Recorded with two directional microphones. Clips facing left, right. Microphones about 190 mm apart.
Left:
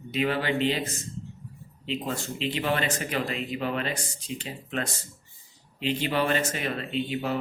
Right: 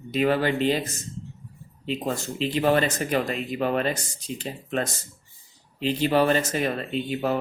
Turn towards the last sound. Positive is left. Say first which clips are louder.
# right 3 dB
turn(degrees=-45)  # may be behind; listen again after turning